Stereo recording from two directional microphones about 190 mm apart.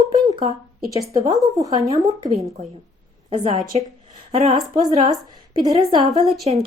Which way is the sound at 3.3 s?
30° right (ahead or behind).